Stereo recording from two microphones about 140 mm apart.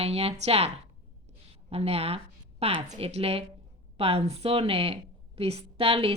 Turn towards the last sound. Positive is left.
turn(degrees=-45)  # may be behind; listen again after turning